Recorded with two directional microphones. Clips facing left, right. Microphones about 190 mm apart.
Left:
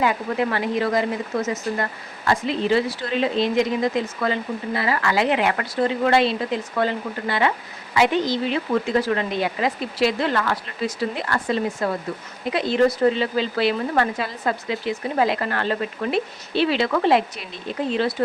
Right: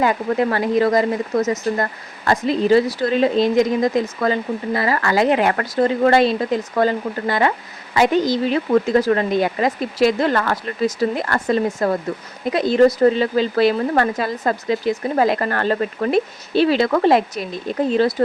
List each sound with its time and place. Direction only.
0.0 s speech: 40° right (ahead or behind)